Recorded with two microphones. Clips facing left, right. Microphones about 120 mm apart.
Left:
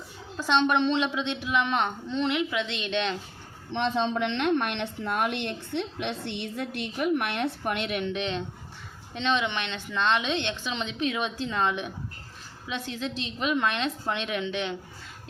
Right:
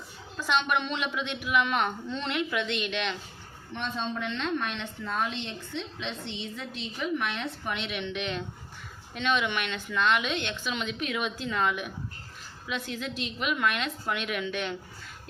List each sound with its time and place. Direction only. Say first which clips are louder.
0.3 s a woman's voice: left 4 dB; 30° left (ahead or behind)
3.7 s a woman's voice: left 7 dB; 90° left; by 14.8 s 20° left (ahead or behind)